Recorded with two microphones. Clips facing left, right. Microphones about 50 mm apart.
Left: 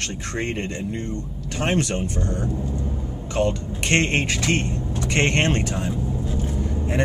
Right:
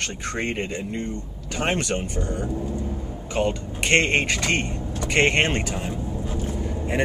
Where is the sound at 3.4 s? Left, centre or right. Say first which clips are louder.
Left 1 dB; centre.